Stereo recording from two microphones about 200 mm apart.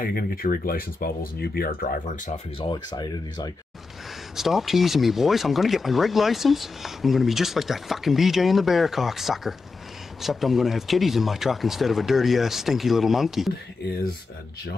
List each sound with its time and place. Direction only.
0.0 s speech: 45° left (ahead or behind)
2.7 s speech: 20° left (ahead or behind)
4.4 s speech: centre (ahead or behind)